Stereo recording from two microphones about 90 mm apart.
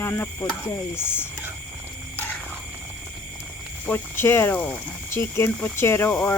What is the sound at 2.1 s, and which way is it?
Wild animals, 20° left (ahead or behind).